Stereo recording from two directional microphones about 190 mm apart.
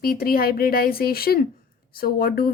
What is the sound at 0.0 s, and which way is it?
Speech, 50° left (ahead or behind).